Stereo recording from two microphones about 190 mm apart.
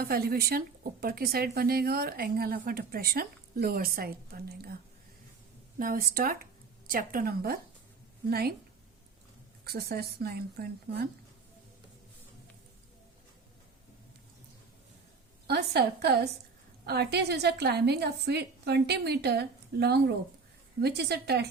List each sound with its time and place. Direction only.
0.0 s a woman's voice: 50° right (ahead or behind)
5.8 s a woman's voice: 50° right (ahead or behind)
9.6 s a woman's voice: 55° right (ahead or behind)
15.4 s a woman's voice: 60° right (ahead or behind)